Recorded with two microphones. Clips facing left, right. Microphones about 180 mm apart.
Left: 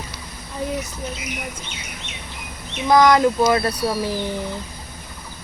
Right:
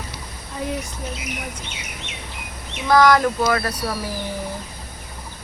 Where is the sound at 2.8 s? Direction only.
20° left (ahead or behind).